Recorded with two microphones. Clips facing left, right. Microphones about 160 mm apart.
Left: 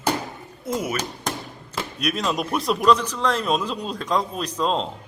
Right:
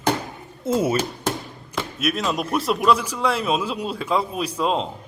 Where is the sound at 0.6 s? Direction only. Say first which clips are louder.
Right 6 dB; 25° right (ahead or behind).